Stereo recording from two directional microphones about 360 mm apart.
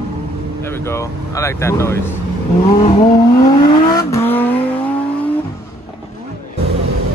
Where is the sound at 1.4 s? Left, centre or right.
Centre.